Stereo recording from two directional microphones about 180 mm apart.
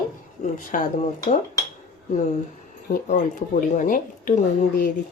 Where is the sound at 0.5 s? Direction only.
50° left (ahead or behind).